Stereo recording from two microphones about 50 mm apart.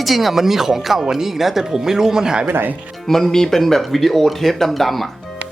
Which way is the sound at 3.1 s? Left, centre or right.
Centre.